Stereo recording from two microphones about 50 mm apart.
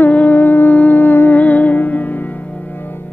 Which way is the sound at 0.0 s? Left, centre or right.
Left.